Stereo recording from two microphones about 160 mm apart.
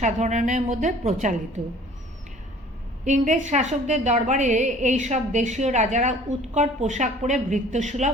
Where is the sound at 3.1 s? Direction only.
50° right (ahead or behind).